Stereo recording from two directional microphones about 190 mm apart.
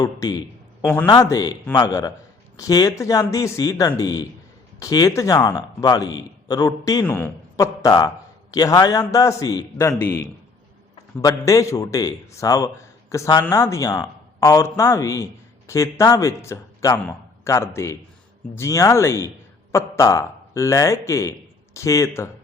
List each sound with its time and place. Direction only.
0.0 s a man's voice: 20° left (ahead or behind)
11.2 s a man's voice: 20° left (ahead or behind)